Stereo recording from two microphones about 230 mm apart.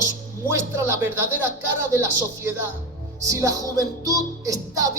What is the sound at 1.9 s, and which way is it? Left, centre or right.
Music, centre.